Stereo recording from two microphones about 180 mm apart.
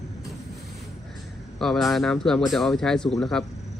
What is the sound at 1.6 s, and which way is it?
A man's voice, centre (ahead or behind).